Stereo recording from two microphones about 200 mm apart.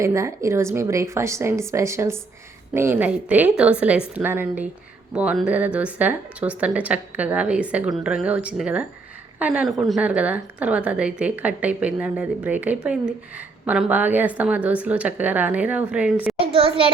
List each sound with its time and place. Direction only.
0.0 s a woman's voice: 15° right (ahead or behind)
16.4 s a child's voice: 25° right (ahead or behind)